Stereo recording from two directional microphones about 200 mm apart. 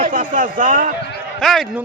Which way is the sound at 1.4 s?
Centre (ahead or behind).